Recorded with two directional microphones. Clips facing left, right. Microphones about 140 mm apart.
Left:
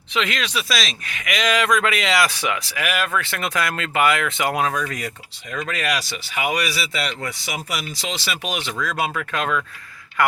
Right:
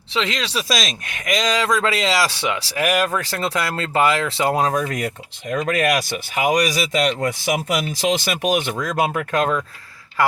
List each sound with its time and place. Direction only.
0.1 s speech: 25° right (ahead or behind); by 1.3 s 45° right (ahead or behind)
1.3 s speech: 30° right (ahead or behind)
10.2 s speech: 25° right (ahead or behind)